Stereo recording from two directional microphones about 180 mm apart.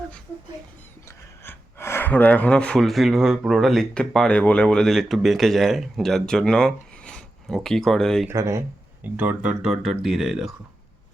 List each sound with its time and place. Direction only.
1.5 s speech: 15° left (ahead or behind)
8.3 s speech: 15° right (ahead or behind)